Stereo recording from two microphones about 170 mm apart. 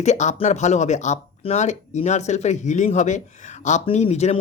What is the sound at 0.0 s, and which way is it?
Speech, 45° left (ahead or behind).